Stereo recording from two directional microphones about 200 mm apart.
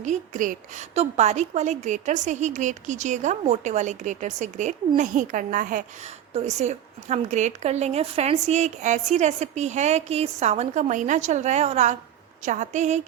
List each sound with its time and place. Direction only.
0.0 s a woman's voice: 40° right (ahead or behind)